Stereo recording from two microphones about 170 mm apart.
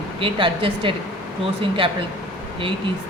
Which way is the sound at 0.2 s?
30° right (ahead or behind).